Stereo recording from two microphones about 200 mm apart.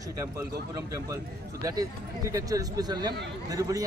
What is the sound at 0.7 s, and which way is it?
Speech, 15° right (ahead or behind).